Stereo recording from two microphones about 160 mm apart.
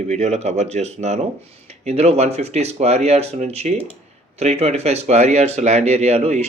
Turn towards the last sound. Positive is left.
turn(degrees=-45)  # may be behind; listen again after turning